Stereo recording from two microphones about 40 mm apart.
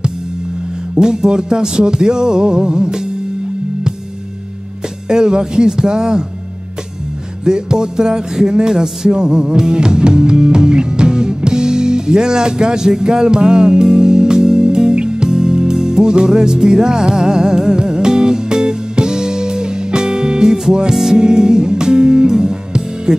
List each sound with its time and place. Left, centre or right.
0.9 s music: centre
5.0 s music: centre
7.4 s music: centre
21.2 s music: centre